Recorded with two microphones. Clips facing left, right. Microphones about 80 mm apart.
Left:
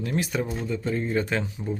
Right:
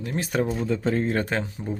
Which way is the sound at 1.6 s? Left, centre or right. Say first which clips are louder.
Even; right.